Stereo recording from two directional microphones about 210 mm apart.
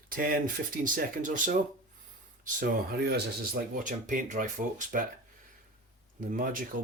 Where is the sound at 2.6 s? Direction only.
45° right (ahead or behind).